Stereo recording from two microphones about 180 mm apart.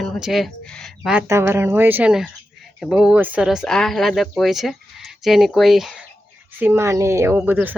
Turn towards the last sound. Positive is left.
turn(degrees=-10)  # may be behind; listen again after turning